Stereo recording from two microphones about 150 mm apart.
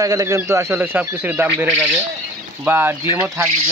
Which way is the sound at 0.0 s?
20° right (ahead or behind).